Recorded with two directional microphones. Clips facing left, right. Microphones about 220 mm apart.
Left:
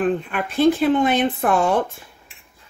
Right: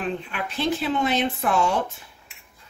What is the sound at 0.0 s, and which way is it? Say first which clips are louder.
Speech: left 7 dB; 50° left (ahead or behind).